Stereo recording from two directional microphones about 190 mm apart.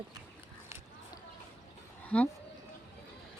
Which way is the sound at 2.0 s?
10° left (ahead or behind).